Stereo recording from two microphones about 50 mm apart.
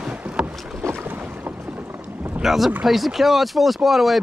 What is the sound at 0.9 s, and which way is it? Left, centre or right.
Boat, right.